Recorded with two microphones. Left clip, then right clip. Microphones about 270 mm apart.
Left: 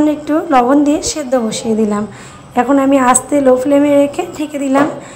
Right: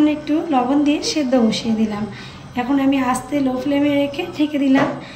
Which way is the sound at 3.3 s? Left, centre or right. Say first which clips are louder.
Left 7 dB; left.